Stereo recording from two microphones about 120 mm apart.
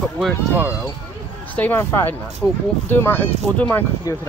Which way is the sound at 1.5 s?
15° left (ahead or behind).